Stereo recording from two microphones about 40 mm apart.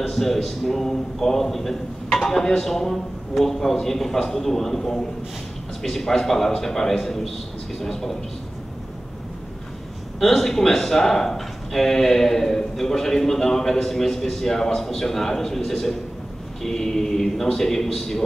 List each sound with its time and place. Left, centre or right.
0.0 s a man's voice: centre
10.2 s a man's voice: centre